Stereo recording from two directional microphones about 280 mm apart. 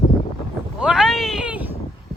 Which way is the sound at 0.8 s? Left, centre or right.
Centre.